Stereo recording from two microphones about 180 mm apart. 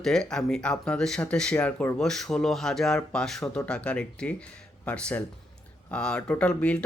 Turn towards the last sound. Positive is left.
turn(degrees=5)  # may be behind; listen again after turning